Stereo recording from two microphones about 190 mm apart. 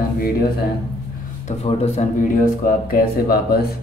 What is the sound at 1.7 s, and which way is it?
Speech, 30° left (ahead or behind).